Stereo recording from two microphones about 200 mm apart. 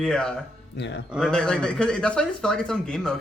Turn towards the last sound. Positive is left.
turn(degrees=5)  # may be behind; listen again after turning